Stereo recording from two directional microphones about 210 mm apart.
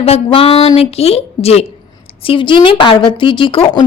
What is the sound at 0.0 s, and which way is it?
A woman's voice, 25° left (ahead or behind).